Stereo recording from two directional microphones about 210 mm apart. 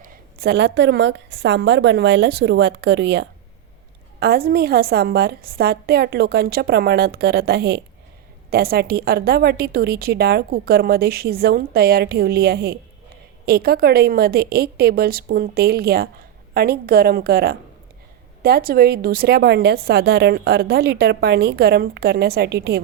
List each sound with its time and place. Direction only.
0.0 s a woman's voice: 45° right (ahead or behind)